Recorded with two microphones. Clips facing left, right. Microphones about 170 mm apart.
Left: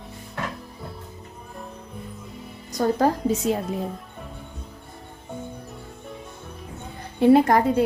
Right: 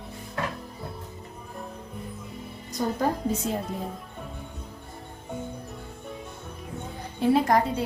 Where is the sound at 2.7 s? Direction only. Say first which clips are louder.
Left 6 dB; 85° left.